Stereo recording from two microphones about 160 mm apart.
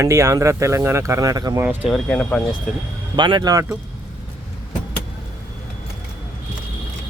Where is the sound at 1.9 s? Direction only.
5° left (ahead or behind).